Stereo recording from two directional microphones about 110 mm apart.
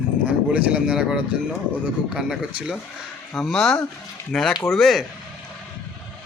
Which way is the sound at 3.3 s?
5° left (ahead or behind).